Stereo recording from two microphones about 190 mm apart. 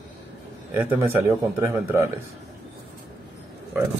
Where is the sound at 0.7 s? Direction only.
10° right (ahead or behind).